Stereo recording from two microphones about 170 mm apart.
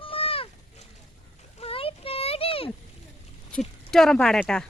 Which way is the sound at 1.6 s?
35° left (ahead or behind).